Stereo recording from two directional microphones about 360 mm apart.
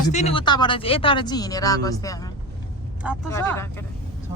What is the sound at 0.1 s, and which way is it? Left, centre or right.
Speech, centre.